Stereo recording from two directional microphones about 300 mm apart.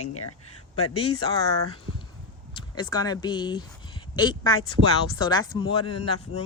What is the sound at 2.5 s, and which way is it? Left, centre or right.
Speech, centre.